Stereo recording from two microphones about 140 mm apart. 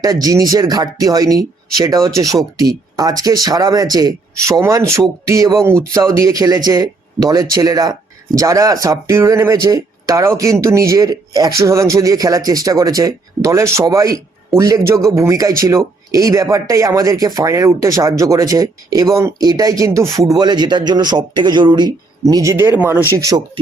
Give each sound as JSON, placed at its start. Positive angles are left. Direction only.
{"t": 0.0, "sound": "speech", "side_deg": -25}